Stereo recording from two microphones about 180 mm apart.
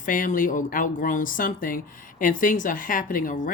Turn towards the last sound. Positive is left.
turn(degrees=50)  # may be behind; listen again after turning